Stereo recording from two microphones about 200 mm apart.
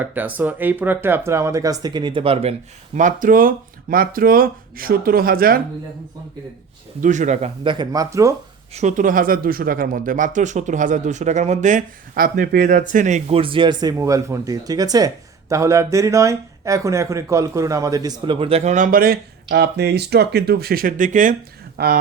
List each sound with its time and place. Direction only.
0.0 s speech: 10° right (ahead or behind); by 5.6 s 45° right (ahead or behind)
7.0 s speech: 40° right (ahead or behind); by 8.4 s 15° right (ahead or behind)
8.7 s speech: 35° right (ahead or behind)
21.8 s speech: 50° right (ahead or behind)